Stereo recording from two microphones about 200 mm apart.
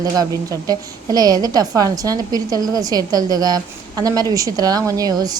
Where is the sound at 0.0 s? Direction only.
20° right (ahead or behind).